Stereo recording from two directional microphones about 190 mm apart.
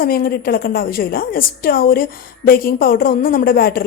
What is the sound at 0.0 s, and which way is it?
A woman's voice, 50° left (ahead or behind).